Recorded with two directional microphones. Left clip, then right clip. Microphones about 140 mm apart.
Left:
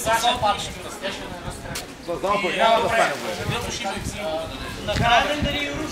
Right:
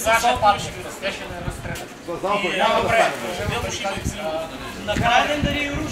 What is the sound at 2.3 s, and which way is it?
A man's voice, 5° left (ahead or behind).